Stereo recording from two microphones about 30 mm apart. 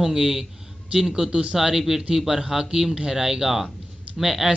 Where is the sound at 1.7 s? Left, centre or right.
Centre.